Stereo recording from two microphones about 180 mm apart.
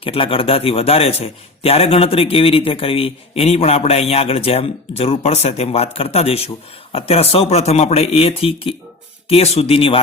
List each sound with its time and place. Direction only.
0.0 s a man's voice: 30° left (ahead or behind)